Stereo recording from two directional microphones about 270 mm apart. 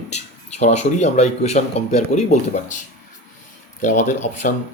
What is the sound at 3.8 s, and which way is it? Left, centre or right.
Speech, left.